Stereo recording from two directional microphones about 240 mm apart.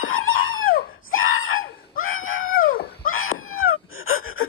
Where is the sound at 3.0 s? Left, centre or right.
Left.